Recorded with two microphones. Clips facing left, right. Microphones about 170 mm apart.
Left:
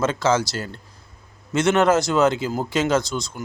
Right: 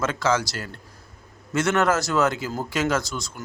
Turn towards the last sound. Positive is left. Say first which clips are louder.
# left 5 dB
turn(degrees=20)  # may be behind; listen again after turning